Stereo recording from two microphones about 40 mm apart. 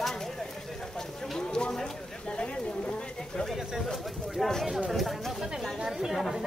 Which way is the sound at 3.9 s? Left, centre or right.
Centre.